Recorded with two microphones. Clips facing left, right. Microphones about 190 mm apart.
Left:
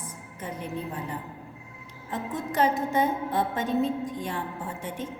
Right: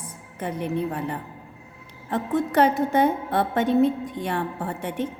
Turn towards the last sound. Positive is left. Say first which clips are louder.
# right 6 dB
turn(degrees=-65)  # may be behind; listen again after turning